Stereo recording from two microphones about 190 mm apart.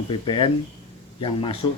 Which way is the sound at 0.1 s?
25° left (ahead or behind).